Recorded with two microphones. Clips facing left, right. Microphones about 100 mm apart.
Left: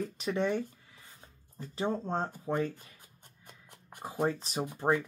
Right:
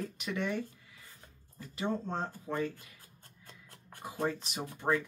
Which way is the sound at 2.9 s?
15° left (ahead or behind).